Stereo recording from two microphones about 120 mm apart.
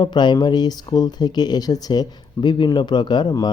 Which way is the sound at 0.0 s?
40° left (ahead or behind).